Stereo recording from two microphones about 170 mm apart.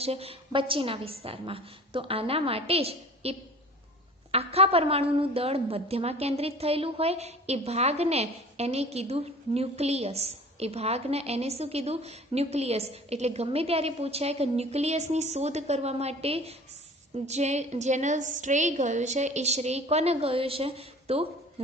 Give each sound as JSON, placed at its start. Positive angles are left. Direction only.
{"t": 0.0, "sound": "a woman's voice", "side_deg": -35}